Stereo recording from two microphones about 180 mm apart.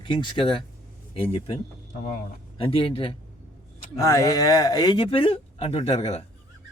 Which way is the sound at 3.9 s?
20° left (ahead or behind).